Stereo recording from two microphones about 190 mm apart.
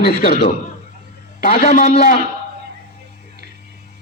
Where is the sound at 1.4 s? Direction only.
45° left (ahead or behind).